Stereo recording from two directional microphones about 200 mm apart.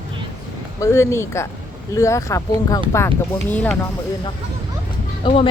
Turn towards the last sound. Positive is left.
turn(degrees=25)  # may be behind; listen again after turning